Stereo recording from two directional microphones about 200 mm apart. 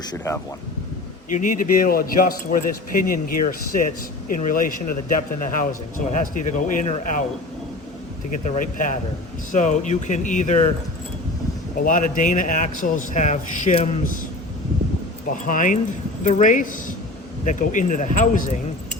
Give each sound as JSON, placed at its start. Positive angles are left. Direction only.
{"t": 1.3, "sound": "speech", "side_deg": 40}
{"t": 8.4, "sound": "speech", "side_deg": 40}
{"t": 11.8, "sound": "speech", "side_deg": 40}
{"t": 15.3, "sound": "speech", "side_deg": 40}